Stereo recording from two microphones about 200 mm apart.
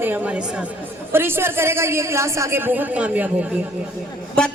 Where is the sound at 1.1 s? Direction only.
10° right (ahead or behind).